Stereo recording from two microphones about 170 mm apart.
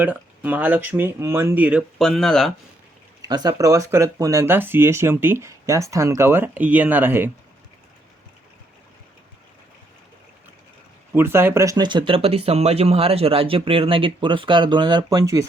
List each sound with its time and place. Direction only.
0.0 s speech: 10° right (ahead or behind)
3.2 s speech: 25° right (ahead or behind)
11.1 s speech: 15° right (ahead or behind)